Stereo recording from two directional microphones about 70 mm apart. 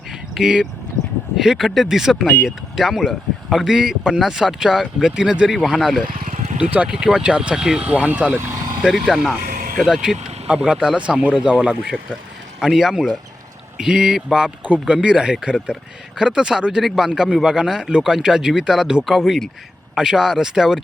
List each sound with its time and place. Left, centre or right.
0.1 s a sound: centre
1.4 s speech: centre
6.6 s speech: centre
8.9 s speech: centre